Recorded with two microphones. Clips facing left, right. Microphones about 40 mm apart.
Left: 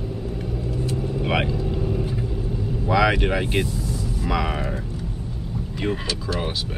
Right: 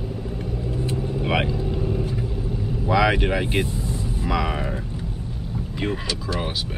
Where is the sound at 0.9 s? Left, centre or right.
Centre.